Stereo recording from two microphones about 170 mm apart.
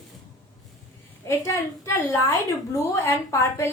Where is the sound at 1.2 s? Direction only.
20° left (ahead or behind).